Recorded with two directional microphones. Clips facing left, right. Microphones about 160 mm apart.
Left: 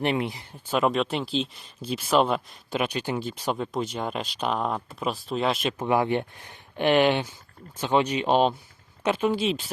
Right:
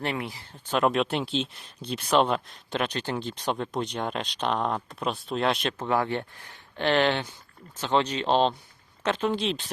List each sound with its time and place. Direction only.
0.0 s speech: 20° left (ahead or behind)
0.5 s speech: 5° left (ahead or behind)
5.8 s speech: 15° left (ahead or behind)